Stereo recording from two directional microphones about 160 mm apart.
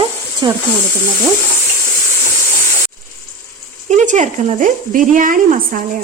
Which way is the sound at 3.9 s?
50° right (ahead or behind).